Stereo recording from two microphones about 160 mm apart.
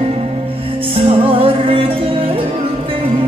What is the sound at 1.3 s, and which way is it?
Music, 35° right (ahead or behind).